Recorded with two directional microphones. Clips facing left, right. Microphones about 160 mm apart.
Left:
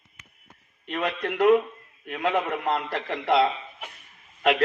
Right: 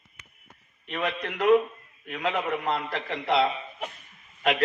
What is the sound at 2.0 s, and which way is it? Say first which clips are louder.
A man's voice: left 2 dB; 50° left (ahead or behind).